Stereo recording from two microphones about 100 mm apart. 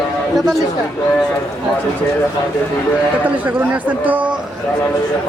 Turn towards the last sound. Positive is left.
turn(degrees=-15)  # may be behind; listen again after turning